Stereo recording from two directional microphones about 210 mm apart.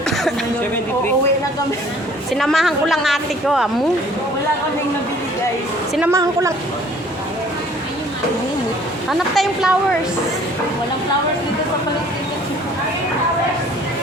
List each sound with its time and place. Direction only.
2.3 s a woman's voice: centre (ahead or behind)
6.0 s a woman's voice: 15° right (ahead or behind)
9.0 s a woman's voice: centre (ahead or behind)